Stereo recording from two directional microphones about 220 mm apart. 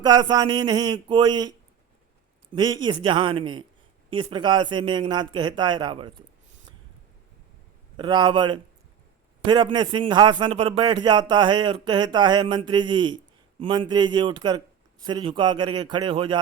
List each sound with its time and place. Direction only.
0.0 s a man's voice: 20° right (ahead or behind)
7.9 s a man's voice: 20° right (ahead or behind)